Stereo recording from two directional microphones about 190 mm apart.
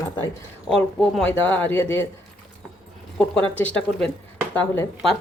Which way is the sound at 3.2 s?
5° left (ahead or behind).